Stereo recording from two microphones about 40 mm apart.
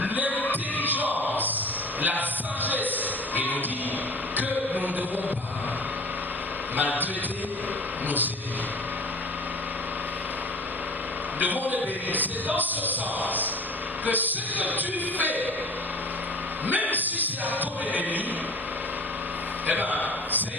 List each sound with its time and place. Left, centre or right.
0.0 s music: right
0.3 s music: left
0.9 s a sound: right
4.4 s mantra: right
6.7 s music: right
11.3 s a man's voice: right
12.9 s music: right
14.0 s a sound: right
16.6 s a sound: right
17.2 s music: right
19.6 s a man's voice: right